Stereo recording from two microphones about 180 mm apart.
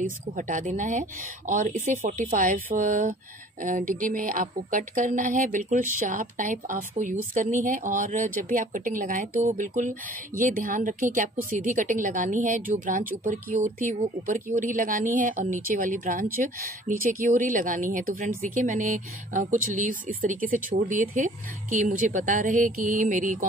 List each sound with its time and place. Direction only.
0.0 s a woman's voice: 45° right (ahead or behind)